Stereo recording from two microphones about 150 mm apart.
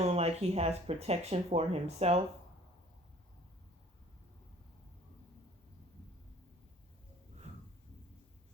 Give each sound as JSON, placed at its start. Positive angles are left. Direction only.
{"t": 0.0, "sound": "speech", "side_deg": -45}